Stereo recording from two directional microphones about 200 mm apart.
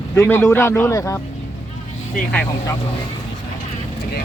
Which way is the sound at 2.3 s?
5° left (ahead or behind).